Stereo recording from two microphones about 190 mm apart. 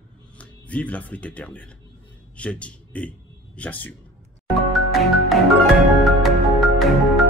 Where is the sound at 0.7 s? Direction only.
5° left (ahead or behind).